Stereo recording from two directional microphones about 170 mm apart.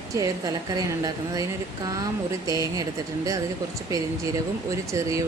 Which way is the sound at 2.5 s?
20° right (ahead or behind).